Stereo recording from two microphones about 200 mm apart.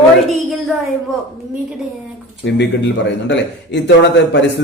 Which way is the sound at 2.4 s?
65° left (ahead or behind).